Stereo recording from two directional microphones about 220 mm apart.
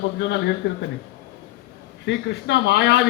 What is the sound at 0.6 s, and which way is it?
Speech, 50° left (ahead or behind).